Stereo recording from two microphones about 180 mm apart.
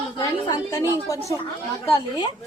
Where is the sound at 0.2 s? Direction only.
20° left (ahead or behind).